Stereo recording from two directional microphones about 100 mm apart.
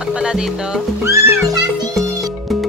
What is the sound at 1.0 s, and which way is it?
Music, 25° right (ahead or behind).